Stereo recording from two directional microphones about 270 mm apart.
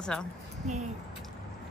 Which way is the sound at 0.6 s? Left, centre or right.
Right.